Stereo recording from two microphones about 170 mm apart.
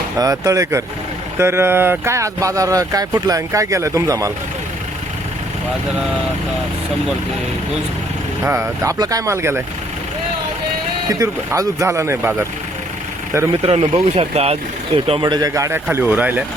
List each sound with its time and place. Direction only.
0.2 s speech: 20° right (ahead or behind)
8.4 s speech: 15° right (ahead or behind)
11.1 s speech: 20° right (ahead or behind)
13.6 s speech: 40° right (ahead or behind); by 16.4 s 10° right (ahead or behind)